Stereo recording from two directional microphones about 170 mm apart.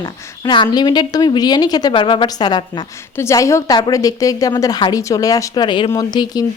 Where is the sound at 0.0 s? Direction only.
25° left (ahead or behind).